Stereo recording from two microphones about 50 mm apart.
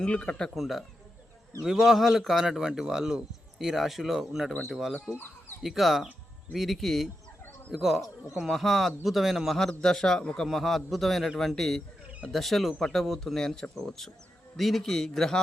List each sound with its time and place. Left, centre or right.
0.0 s speech: left
0.5 s speech: centre
5.1 s chicken: left
5.6 s speech: centre
9.6 s speech: centre
10.4 s speech: centre